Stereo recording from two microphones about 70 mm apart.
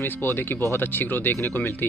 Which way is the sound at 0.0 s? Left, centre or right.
Left.